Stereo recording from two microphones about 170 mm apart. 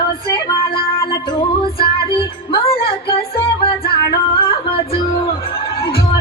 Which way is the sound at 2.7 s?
35° left (ahead or behind).